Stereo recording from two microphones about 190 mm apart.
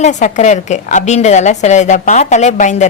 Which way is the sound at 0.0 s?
40° left (ahead or behind).